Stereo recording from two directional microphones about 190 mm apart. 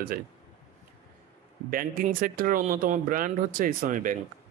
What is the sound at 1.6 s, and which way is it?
Speech, 50° right (ahead or behind).